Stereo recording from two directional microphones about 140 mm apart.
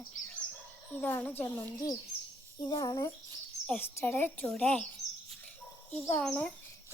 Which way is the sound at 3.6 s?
5° left (ahead or behind).